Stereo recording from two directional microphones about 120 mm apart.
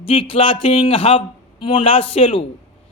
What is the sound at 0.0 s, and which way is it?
A man's voice, 50° left (ahead or behind).